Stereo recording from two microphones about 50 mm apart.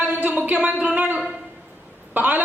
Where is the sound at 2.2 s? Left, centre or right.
Right.